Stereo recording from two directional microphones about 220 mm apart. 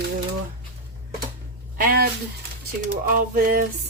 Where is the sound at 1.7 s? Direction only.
40° right (ahead or behind).